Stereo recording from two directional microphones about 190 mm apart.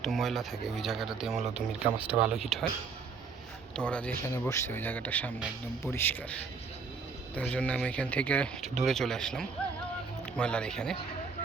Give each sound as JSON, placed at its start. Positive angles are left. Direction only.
{"t": 0.0, "sound": "speech", "side_deg": 0}
{"t": 1.8, "sound": "speech", "side_deg": -30}
{"t": 2.2, "sound": "speech", "side_deg": 0}
{"t": 3.8, "sound": "speech", "side_deg": 5}